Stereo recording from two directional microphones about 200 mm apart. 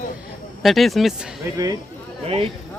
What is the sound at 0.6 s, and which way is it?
Speech, centre (ahead or behind).